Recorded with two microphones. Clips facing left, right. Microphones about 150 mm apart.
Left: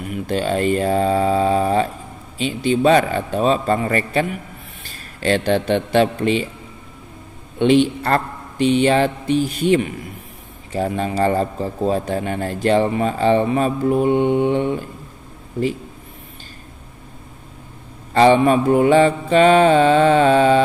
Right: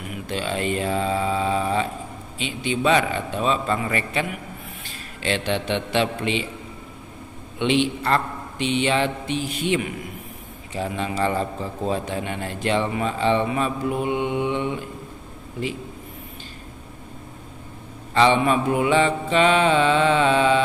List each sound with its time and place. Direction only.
0.1 s mantra: 40° left (ahead or behind)
2.3 s a man's voice: 40° left (ahead or behind)
5.2 s mantra: 45° left (ahead or behind)
7.5 s mantra: 45° left (ahead or behind)
10.7 s a man's voice: 45° left (ahead or behind)
18.1 s mantra: 45° left (ahead or behind)